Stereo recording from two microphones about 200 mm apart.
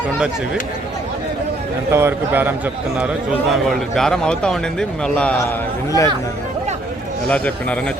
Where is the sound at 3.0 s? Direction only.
Centre (ahead or behind).